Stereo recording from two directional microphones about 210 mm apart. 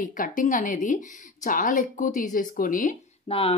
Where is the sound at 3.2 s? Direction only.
25° left (ahead or behind).